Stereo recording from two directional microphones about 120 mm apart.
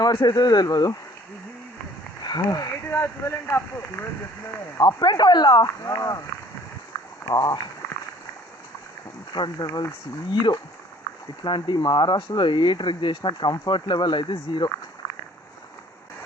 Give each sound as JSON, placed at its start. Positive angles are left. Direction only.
{"t": 0.0, "sound": "speech", "side_deg": 40}
{"t": 2.2, "sound": "speech", "side_deg": 35}
{"t": 4.8, "sound": "speech", "side_deg": 35}
{"t": 7.3, "sound": "speech", "side_deg": 35}
{"t": 9.3, "sound": "speech", "side_deg": 35}